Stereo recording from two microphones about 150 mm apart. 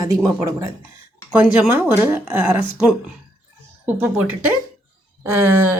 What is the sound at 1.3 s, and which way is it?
Speech, 10° right (ahead or behind).